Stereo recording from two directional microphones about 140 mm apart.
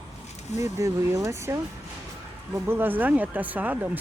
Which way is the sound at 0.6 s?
25° right (ahead or behind).